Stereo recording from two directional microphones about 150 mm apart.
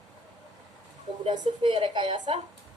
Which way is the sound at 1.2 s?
30° right (ahead or behind).